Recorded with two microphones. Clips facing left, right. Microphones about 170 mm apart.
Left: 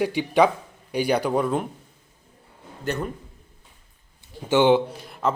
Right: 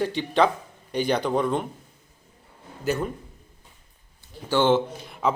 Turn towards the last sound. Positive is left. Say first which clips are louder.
# even
turn(degrees=0)  # may be behind; listen again after turning